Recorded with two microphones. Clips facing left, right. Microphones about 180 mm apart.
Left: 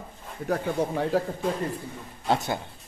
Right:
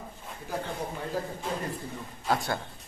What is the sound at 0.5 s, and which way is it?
Speech, 75° left (ahead or behind).